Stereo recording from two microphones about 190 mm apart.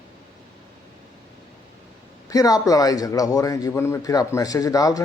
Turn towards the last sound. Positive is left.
turn(degrees=20)  # may be behind; listen again after turning